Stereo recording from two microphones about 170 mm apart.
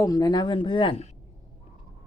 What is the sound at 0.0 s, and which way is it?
Speech, 20° left (ahead or behind).